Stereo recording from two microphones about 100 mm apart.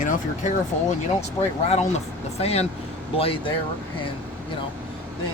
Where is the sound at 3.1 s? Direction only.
65° left (ahead or behind).